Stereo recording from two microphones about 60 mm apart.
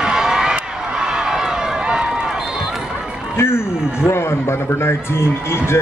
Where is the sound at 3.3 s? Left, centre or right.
Left.